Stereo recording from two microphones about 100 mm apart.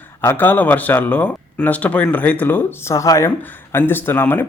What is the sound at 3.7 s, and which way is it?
Speech, 20° left (ahead or behind).